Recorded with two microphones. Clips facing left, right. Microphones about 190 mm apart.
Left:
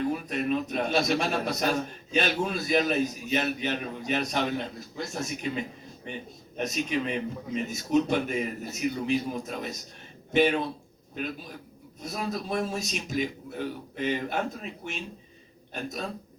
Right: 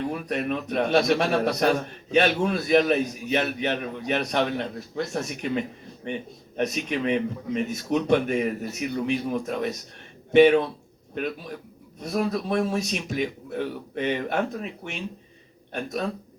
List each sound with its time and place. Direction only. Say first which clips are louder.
0.1 s a man's voice: even; 60° right (ahead or behind)